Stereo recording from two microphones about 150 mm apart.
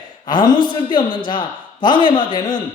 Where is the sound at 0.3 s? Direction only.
30° left (ahead or behind).